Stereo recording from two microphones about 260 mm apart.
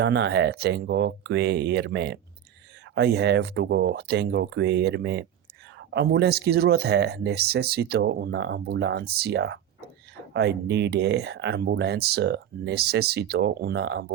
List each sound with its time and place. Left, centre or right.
0.0 s speech: right